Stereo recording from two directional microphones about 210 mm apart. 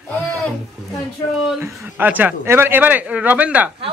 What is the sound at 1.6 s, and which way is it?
A man's voice, 10° right (ahead or behind).